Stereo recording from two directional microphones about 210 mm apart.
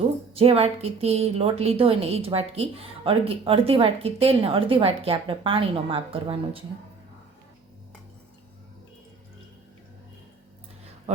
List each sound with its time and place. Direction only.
0.3 s a woman's voice: 30° right (ahead or behind)